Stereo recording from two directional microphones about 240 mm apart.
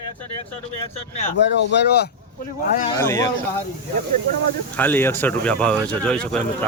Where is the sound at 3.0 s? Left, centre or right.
Centre.